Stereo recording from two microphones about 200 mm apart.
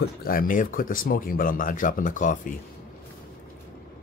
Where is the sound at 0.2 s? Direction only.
45° left (ahead or behind).